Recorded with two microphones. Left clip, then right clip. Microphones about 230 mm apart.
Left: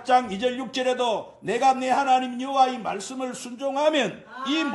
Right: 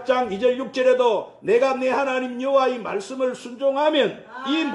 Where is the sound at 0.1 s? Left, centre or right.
Left.